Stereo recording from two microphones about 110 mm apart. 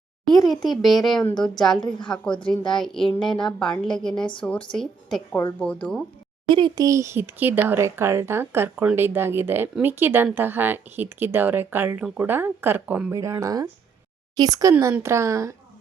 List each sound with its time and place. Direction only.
0.4 s a woman's voice: centre (ahead or behind)
6.5 s speech: 45° right (ahead or behind); by 15.5 s 30° right (ahead or behind)